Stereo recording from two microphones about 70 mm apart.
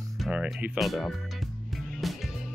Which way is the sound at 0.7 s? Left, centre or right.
Centre.